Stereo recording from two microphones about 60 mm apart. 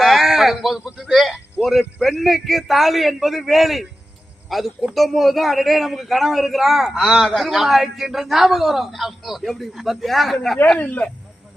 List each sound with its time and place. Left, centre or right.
0.0 s sheep: centre
1.1 s a woman's voice: centre
10.8 s speech: left